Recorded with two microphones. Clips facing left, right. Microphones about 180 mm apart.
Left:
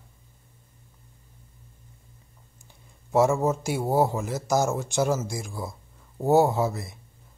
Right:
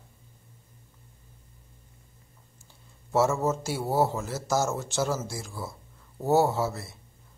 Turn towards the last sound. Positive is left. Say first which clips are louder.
# left 3 dB
turn(degrees=15)  # may be behind; listen again after turning